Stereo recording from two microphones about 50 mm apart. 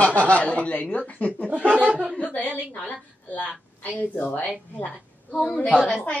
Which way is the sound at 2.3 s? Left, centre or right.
Left.